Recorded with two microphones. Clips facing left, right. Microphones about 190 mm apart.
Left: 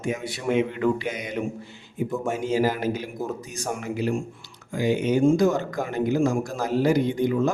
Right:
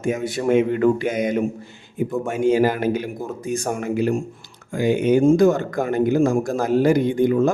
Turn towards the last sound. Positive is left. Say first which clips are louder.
# right 5 dB
turn(degrees=-50)  # may be behind; listen again after turning